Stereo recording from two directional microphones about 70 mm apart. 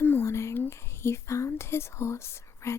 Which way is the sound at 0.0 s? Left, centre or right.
Left.